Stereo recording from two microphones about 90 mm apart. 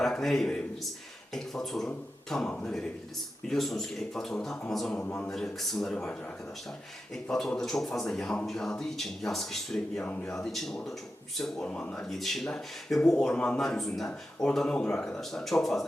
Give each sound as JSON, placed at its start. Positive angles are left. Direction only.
{"t": 0.0, "sound": "a man's voice", "side_deg": 5}